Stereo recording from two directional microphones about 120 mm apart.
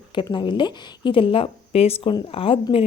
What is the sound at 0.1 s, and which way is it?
A woman's voice, 45° left (ahead or behind).